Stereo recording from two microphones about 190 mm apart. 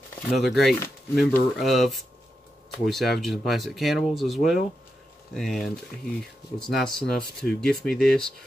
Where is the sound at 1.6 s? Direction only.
Centre (ahead or behind).